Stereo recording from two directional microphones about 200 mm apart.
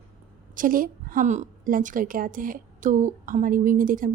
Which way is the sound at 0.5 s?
45° right (ahead or behind).